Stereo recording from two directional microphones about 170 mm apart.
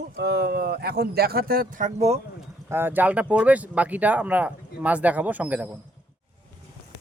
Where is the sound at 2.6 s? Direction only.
15° right (ahead or behind).